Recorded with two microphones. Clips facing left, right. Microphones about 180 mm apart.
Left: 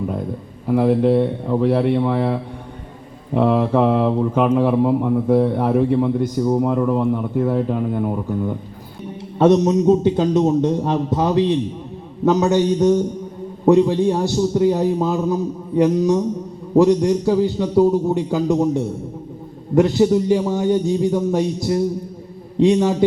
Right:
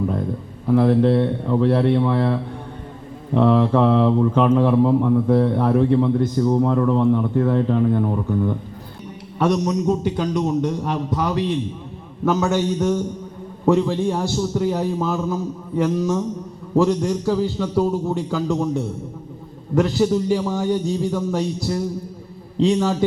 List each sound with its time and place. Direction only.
0.7 s mantra: 10° left (ahead or behind)
9.4 s a man's voice: 25° left (ahead or behind)